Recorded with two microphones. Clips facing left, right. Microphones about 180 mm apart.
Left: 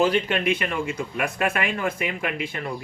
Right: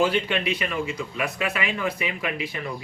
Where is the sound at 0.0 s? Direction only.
40° left (ahead or behind).